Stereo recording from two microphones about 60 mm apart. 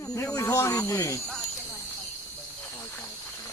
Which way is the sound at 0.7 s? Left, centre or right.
Left.